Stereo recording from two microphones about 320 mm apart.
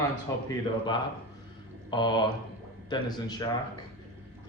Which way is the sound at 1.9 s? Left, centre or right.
Centre.